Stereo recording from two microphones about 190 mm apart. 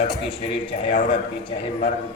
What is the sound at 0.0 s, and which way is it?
A man's voice, 30° left (ahead or behind).